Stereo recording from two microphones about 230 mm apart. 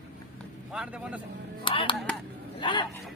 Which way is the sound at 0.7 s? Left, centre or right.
Centre.